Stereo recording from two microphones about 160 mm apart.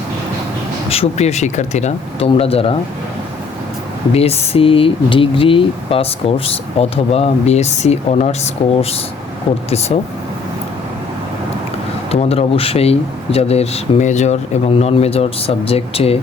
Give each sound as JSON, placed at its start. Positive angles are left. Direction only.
{"t": 0.9, "sound": "speech", "side_deg": 40}
{"t": 4.1, "sound": "speech", "side_deg": 40}
{"t": 9.9, "sound": "speech", "side_deg": 45}
{"t": 12.1, "sound": "speech", "side_deg": 40}